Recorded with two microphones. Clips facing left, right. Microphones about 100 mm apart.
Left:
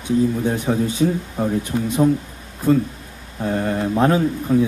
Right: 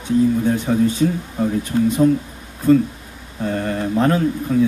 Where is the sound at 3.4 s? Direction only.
10° left (ahead or behind).